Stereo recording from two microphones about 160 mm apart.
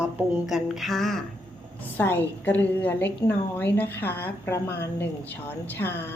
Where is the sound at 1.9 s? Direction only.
15° left (ahead or behind).